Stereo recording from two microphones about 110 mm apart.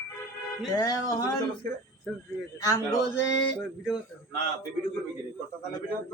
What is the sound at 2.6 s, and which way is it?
Speech, 30° left (ahead or behind).